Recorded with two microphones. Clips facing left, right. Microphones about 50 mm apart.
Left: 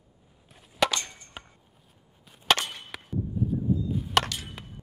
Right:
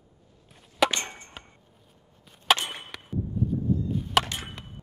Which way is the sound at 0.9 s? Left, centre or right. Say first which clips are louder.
Right 1 dB; right.